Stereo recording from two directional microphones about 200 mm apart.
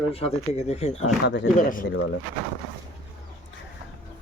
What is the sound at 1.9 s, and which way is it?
Speech, 90° left.